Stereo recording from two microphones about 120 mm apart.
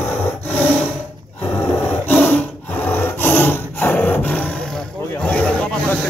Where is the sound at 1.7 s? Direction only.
15° left (ahead or behind).